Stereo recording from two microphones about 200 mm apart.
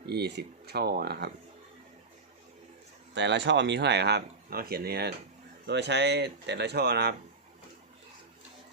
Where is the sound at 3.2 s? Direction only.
60° right (ahead or behind).